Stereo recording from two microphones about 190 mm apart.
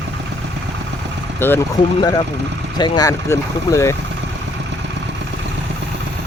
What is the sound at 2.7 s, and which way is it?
Speech, 20° left (ahead or behind).